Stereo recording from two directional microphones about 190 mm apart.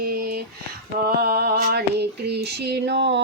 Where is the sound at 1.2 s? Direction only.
55° right (ahead or behind).